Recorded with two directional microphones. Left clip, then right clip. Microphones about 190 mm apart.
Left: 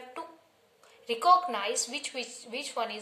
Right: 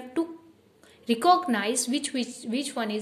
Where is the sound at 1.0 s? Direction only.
35° right (ahead or behind).